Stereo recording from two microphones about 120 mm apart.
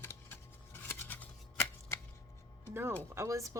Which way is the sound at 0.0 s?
20° left (ahead or behind).